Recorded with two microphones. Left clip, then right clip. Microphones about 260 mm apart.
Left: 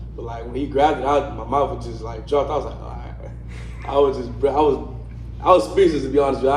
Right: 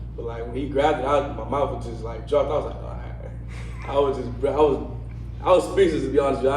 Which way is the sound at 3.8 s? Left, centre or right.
Left.